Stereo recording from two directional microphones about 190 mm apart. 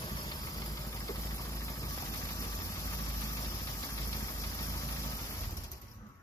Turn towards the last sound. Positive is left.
turn(degrees=15)  # may be behind; listen again after turning